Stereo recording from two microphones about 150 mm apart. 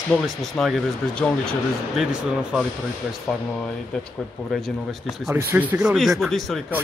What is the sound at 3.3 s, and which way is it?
A man's voice, 5° left (ahead or behind).